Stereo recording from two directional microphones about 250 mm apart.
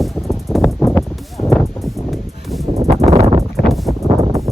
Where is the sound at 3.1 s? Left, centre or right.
Right.